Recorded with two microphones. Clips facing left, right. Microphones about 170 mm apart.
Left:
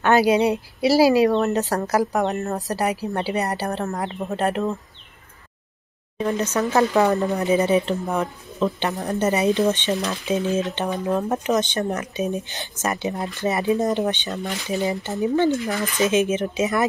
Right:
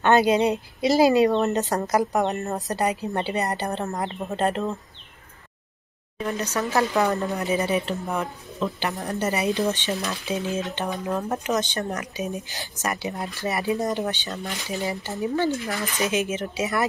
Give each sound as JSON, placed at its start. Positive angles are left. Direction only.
{"t": 0.0, "sound": "speech", "side_deg": 5}
{"t": 6.1, "sound": "speech", "side_deg": 25}